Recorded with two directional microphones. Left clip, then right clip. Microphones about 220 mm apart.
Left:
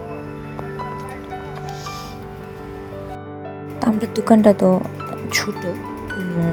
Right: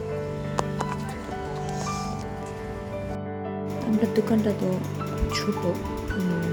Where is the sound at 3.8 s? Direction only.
35° left (ahead or behind).